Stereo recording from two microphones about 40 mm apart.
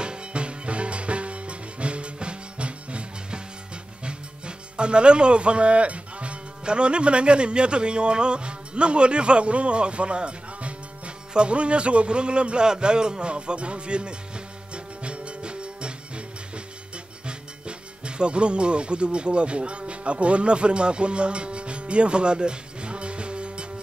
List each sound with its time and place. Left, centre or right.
0.0 s music: right
4.0 s speech: right
14.7 s music: right